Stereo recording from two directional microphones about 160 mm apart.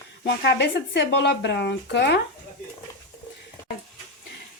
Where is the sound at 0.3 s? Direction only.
90° left.